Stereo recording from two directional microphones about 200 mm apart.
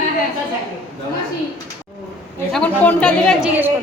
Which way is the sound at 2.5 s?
5° left (ahead or behind).